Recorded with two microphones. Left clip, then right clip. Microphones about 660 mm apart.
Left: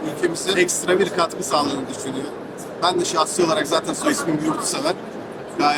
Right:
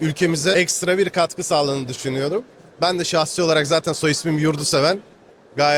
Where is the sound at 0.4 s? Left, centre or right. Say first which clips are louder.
Right 1 dB; right.